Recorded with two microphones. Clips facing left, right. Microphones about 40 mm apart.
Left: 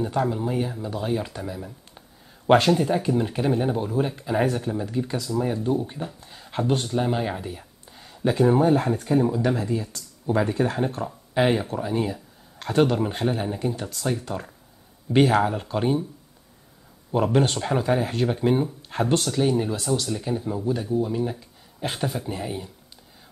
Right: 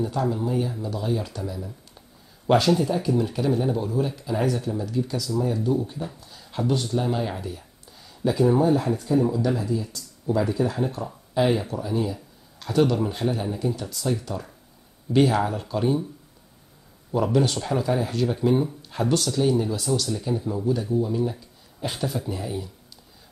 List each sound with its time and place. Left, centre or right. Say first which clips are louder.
0.0 s speech: left 1 dB; left
17.1 s speech: left 1 dB; left